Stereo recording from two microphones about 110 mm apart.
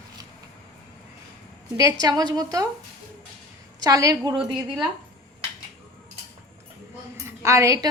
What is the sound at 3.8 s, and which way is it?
Speech, 30° right (ahead or behind).